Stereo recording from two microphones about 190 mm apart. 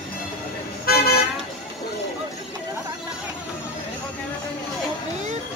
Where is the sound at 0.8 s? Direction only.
55° left (ahead or behind).